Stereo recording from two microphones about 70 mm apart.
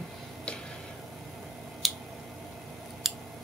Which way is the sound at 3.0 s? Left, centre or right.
Centre.